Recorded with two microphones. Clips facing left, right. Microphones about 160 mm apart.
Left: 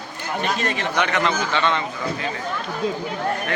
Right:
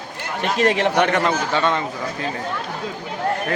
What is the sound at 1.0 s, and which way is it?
Speech, 50° right (ahead or behind).